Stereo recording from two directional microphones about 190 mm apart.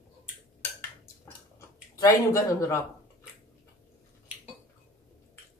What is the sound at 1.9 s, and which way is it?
Speech, 15° left (ahead or behind).